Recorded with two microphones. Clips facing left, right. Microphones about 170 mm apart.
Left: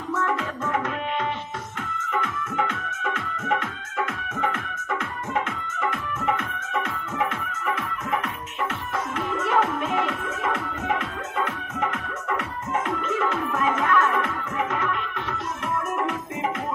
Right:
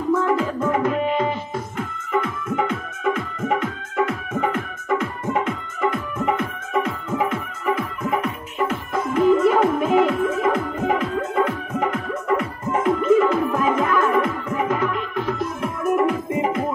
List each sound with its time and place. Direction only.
0.1 s music: 30° right (ahead or behind)
2.1 s music: 30° right (ahead or behind)
5.3 s music: 30° right (ahead or behind)
9.3 s music: 35° right (ahead or behind)